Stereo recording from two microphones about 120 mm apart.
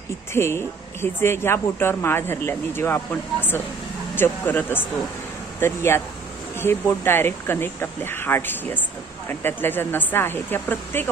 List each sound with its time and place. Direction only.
0.3 s speech: 20° left (ahead or behind)